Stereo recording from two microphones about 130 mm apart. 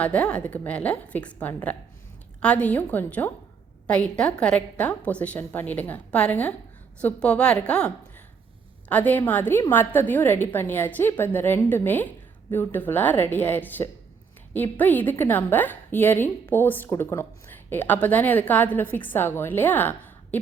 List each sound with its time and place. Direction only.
0.0 s a woman's voice: 10° left (ahead or behind)